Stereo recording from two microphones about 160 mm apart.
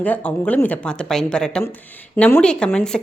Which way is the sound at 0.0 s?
10° left (ahead or behind).